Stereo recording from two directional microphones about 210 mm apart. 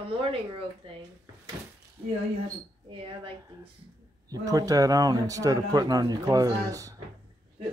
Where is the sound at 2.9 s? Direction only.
25° right (ahead or behind).